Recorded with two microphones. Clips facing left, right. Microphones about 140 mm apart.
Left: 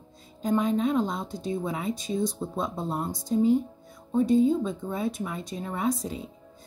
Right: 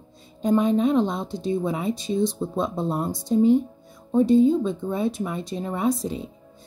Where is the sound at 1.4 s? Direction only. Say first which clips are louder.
Right 6 dB; 30° right (ahead or behind).